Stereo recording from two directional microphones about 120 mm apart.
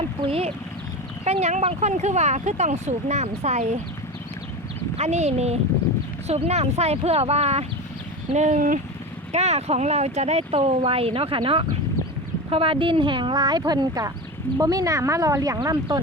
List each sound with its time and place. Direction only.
0.2 s speech: 50° right (ahead or behind)
1.2 s speech: 65° right (ahead or behind)
4.9 s speech: 65° right (ahead or behind)
8.3 s speech: 85° right
9.3 s speech: 65° right (ahead or behind); by 16.0 s 35° right (ahead or behind)